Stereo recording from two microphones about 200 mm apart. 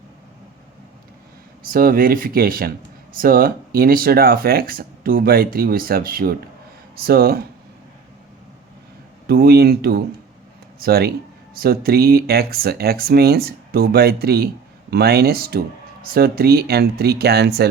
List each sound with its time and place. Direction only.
1.7 s speech: 45° right (ahead or behind)
9.2 s speech: 50° right (ahead or behind)